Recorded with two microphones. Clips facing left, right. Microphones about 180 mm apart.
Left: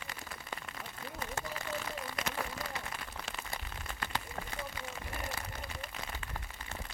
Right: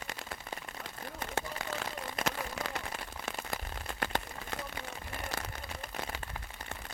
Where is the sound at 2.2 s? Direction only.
80° right.